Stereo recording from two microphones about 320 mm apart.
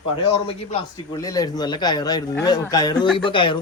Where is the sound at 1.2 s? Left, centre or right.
Centre.